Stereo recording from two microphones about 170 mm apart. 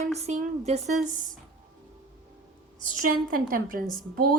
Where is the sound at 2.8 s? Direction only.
55° right (ahead or behind).